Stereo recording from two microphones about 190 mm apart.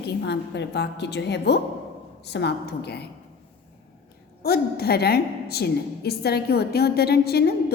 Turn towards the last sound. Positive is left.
turn(degrees=55)  # may be behind; listen again after turning